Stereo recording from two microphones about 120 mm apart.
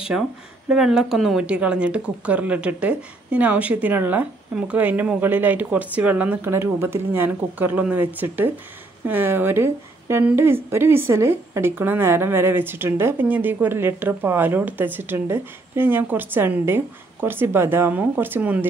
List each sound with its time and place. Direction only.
0.7 s a woman's voice: 5° right (ahead or behind)